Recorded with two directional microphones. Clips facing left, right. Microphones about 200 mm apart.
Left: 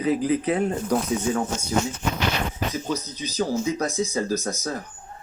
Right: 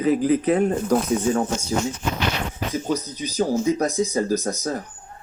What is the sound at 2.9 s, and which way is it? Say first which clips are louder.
A man's voice: right 3 dB; 45° right (ahead or behind).